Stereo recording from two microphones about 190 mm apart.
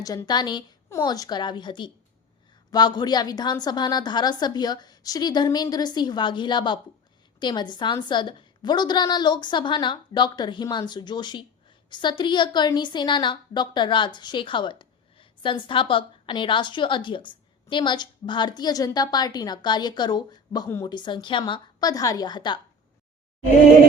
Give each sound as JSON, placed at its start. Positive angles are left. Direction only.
{"t": 0.0, "sound": "a woman's voice", "side_deg": 20}